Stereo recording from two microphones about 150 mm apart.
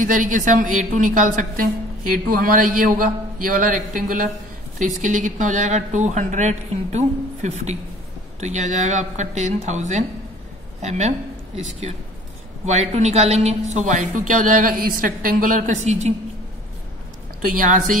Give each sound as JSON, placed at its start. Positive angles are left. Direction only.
{"t": 0.0, "sound": "a woman's voice", "side_deg": -60}
{"t": 17.4, "sound": "a woman's voice", "side_deg": -65}